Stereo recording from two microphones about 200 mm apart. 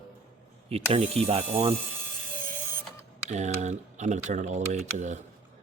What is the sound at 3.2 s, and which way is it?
Speech, 35° right (ahead or behind).